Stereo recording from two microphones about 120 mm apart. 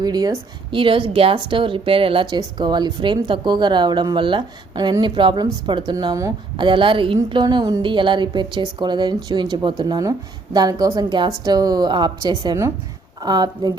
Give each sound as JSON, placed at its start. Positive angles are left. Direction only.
{"t": 0.0, "sound": "speech", "side_deg": -35}
{"t": 0.8, "sound": "speech", "side_deg": -45}
{"t": 2.3, "sound": "speech", "side_deg": -40}
{"t": 6.6, "sound": "speech", "side_deg": -45}
{"t": 7.8, "sound": "speech", "side_deg": -45}